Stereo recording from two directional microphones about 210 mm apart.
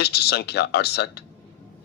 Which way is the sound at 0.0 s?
50° left (ahead or behind).